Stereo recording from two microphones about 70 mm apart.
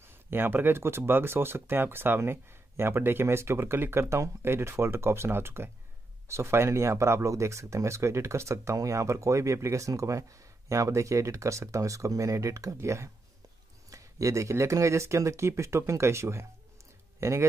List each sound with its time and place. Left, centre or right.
0.0 s speech: right